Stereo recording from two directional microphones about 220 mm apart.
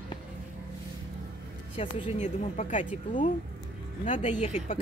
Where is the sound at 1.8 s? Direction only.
30° left (ahead or behind).